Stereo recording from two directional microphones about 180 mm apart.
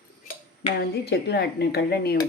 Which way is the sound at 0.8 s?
65° left (ahead or behind).